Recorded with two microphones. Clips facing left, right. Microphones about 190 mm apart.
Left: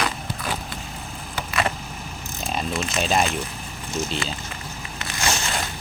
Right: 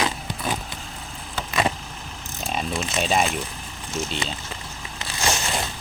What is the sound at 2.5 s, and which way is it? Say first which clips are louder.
Speech: even; centre (ahead or behind).